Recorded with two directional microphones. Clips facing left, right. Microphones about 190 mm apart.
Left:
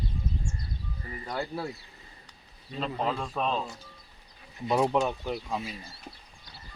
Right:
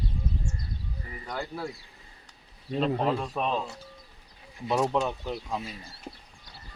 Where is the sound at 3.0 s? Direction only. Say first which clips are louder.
Right 2 dB; 10° right (ahead or behind).